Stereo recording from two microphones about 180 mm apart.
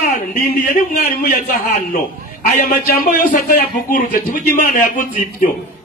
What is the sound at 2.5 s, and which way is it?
Speech, 55° left (ahead or behind).